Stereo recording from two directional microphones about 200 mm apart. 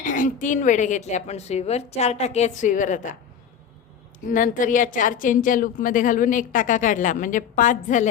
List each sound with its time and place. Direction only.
0.0 s a woman's voice: 40° left (ahead or behind)
4.3 s a woman's voice: 40° left (ahead or behind)